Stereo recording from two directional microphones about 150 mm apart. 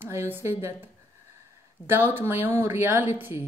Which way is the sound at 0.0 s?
15° right (ahead or behind).